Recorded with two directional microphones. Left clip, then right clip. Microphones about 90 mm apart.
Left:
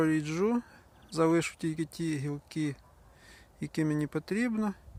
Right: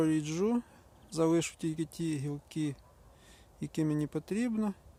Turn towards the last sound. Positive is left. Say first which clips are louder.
# left 2 dB
turn(degrees=-10)  # may be behind; listen again after turning